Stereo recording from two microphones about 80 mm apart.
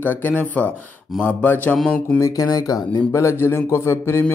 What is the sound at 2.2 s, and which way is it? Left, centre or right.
Speech, left.